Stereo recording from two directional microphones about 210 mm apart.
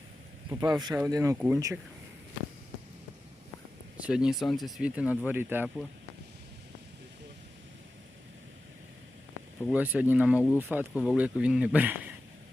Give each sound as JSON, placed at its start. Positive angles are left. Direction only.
{"t": 0.5, "sound": "speech", "side_deg": -15}
{"t": 4.0, "sound": "speech", "side_deg": -5}
{"t": 9.6, "sound": "speech", "side_deg": -5}